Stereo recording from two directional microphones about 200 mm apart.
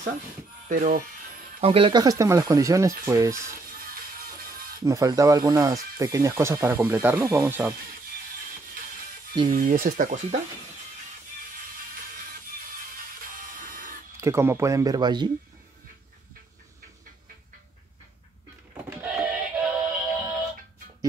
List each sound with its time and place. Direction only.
0.7 s speech: 40° right (ahead or behind)
1.6 s speech: 30° right (ahead or behind)
3.7 s music: 45° right (ahead or behind)
4.8 s speech: 15° right (ahead or behind)
9.5 s speech: 40° right (ahead or behind)
14.1 s speech: 15° right (ahead or behind)
18.9 s synthetic singing: 5° right (ahead or behind)